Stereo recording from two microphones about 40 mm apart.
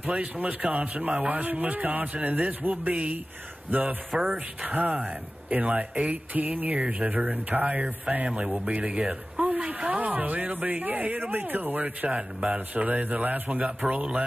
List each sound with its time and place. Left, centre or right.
0.0 s speech: right
4.2 s speech: right
9.6 s a sound: right
10.1 s speech: right
12.1 s speech: right